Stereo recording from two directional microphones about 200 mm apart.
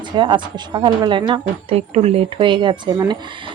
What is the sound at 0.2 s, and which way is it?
A woman's voice, 25° right (ahead or behind).